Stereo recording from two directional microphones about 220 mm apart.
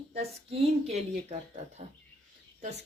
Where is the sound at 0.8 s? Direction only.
30° right (ahead or behind).